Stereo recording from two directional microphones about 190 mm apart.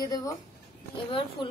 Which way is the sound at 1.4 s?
25° left (ahead or behind).